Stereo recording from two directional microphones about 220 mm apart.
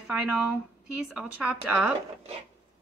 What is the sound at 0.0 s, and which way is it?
Speech, 5° right (ahead or behind).